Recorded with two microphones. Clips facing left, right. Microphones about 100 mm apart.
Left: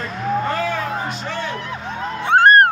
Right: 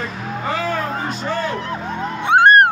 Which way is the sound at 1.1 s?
40° right (ahead or behind).